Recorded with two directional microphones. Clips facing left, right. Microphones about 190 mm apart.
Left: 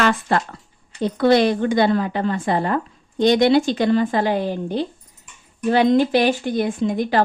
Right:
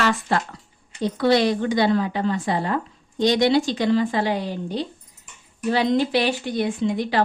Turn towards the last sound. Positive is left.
turn(degrees=50)  # may be behind; listen again after turning